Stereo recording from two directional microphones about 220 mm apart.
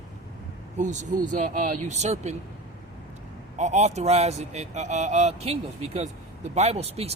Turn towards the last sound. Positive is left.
turn(degrees=-30)  # may be behind; listen again after turning